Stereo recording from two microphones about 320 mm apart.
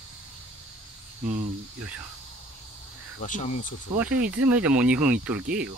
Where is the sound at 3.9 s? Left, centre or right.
Centre.